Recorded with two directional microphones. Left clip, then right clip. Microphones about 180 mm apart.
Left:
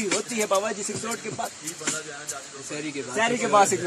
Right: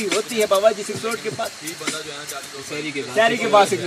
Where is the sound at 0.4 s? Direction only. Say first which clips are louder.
Right 6 dB; 25° left (ahead or behind).